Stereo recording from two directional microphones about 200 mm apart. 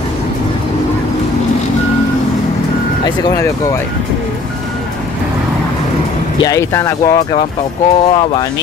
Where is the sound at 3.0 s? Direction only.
20° left (ahead or behind).